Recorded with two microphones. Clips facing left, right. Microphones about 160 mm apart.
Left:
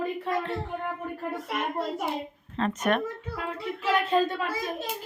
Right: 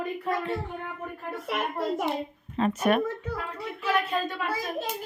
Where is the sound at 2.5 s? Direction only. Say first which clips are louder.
Right 2 dB; 10° right (ahead or behind).